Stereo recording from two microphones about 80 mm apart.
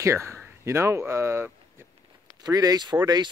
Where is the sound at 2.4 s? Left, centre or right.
Right.